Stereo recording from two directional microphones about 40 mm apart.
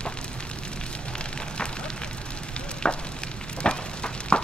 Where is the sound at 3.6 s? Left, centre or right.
Left.